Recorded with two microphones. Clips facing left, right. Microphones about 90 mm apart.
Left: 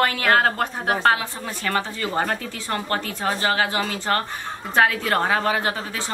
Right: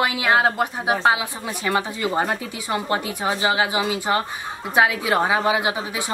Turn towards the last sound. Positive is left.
turn(degrees=-10)  # may be behind; listen again after turning